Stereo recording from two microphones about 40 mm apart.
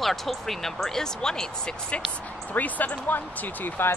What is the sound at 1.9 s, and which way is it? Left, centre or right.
Speech, left.